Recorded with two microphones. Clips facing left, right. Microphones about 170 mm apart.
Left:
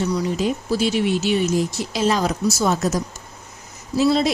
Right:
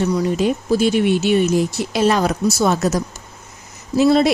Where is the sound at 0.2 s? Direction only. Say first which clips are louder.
Right 4 dB; 55° right (ahead or behind).